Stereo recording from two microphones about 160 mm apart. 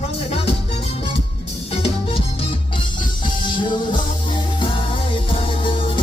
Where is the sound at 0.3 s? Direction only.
35° left (ahead or behind).